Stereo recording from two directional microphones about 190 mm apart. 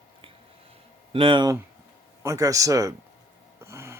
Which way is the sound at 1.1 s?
25° right (ahead or behind).